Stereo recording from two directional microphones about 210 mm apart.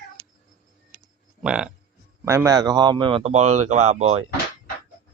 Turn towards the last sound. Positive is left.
turn(degrees=-30)  # may be behind; listen again after turning